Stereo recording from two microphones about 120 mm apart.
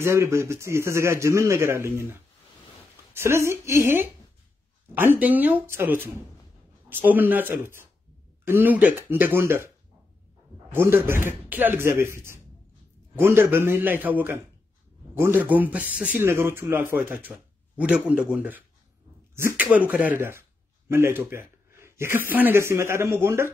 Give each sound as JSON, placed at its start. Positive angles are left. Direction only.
{"t": 0.0, "sound": "speech", "side_deg": -20}
{"t": 10.7, "sound": "speech", "side_deg": -20}